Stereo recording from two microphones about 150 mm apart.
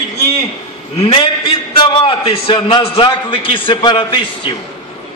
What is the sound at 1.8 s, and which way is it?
A man's voice, 35° left (ahead or behind).